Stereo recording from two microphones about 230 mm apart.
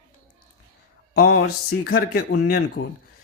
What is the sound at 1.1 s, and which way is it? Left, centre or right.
Speech, left.